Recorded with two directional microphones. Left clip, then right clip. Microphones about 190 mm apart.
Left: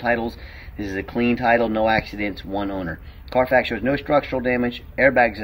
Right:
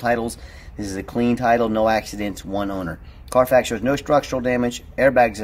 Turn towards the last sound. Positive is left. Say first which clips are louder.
# right 1 dB
turn(degrees=-25)  # may be behind; listen again after turning